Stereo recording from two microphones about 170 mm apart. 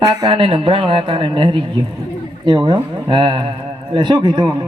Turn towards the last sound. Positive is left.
turn(degrees=-25)  # may be behind; listen again after turning